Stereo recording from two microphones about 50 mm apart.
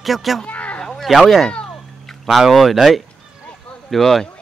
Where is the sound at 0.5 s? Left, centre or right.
Left.